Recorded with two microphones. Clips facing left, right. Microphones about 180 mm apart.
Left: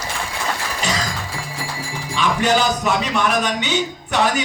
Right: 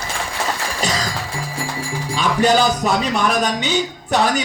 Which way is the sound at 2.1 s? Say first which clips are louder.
Right 2 dB; 40° right (ahead or behind).